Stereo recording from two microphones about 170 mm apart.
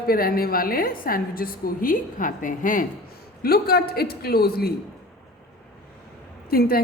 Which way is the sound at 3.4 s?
65° left (ahead or behind).